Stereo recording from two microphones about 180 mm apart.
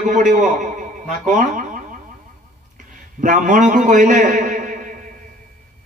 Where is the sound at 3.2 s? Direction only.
50° right (ahead or behind).